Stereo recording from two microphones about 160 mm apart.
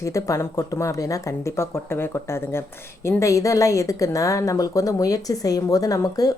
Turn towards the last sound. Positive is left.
turn(degrees=20)  # may be behind; listen again after turning